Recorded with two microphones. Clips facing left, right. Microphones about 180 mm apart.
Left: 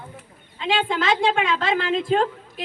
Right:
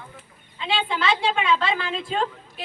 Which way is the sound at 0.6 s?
50° left (ahead or behind).